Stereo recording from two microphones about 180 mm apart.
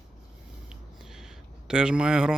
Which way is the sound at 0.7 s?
Centre (ahead or behind).